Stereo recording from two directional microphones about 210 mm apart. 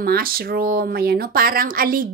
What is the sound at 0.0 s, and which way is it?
Speech, 45° right (ahead or behind).